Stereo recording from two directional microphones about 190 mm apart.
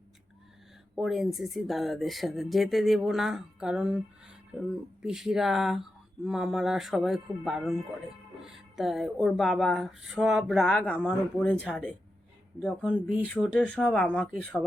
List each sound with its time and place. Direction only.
0.9 s speech: centre (ahead or behind)